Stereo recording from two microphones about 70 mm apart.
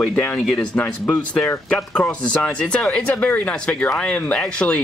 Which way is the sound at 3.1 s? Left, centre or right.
Left.